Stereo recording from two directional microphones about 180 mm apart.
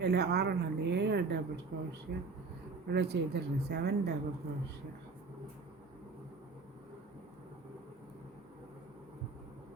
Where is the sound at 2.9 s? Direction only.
70° right (ahead or behind).